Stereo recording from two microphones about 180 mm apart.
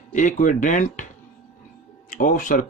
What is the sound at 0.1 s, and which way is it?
Speech, 45° left (ahead or behind).